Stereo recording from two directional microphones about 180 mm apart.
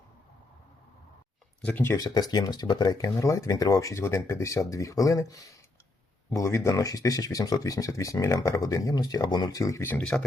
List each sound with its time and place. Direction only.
1.6 s speech: 10° left (ahead or behind)